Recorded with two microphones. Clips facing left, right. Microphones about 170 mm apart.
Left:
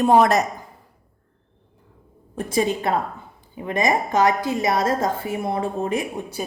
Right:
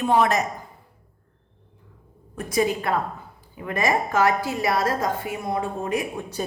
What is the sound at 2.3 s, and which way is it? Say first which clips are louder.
A woman's voice: left 1 dB; 25° left (ahead or behind).